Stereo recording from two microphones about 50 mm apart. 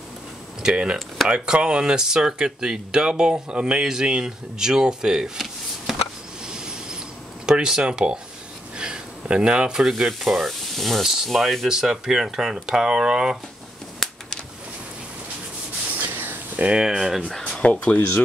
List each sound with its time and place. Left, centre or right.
0.6 s speech: centre
0.9 s speech: centre
1.3 s speech: centre
6.4 s train: centre
7.4 s speech: centre
14.0 s a sound: centre
16.0 s a sound: right
16.8 s speech: centre
17.4 s speech: left